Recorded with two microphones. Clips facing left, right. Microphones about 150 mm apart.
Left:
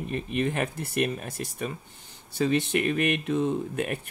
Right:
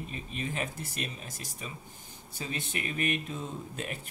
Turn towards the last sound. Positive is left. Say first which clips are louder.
# left 10 dB
turn(degrees=65)  # may be behind; listen again after turning